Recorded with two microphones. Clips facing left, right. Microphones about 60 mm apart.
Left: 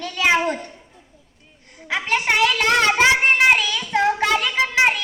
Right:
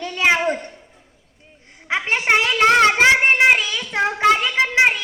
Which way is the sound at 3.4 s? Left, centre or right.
Right.